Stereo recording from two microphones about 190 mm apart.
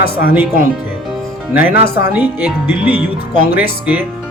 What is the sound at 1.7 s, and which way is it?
Speech, 55° left (ahead or behind).